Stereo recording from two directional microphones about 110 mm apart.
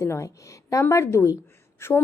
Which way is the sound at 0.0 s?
25° left (ahead or behind).